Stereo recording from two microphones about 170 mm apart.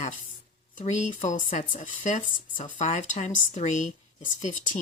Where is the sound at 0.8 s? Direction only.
45° left (ahead or behind).